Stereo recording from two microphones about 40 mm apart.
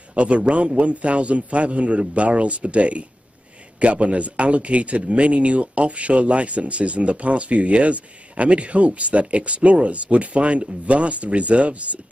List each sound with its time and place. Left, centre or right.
0.1 s speech: right